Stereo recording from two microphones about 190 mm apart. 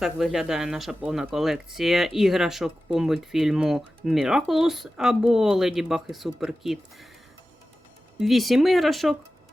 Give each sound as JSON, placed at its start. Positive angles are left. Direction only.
{"t": 0.0, "sound": "speech", "side_deg": 0}
{"t": 8.2, "sound": "speech", "side_deg": 0}